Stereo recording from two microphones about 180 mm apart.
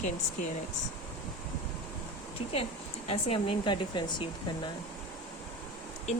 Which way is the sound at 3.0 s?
30° left (ahead or behind).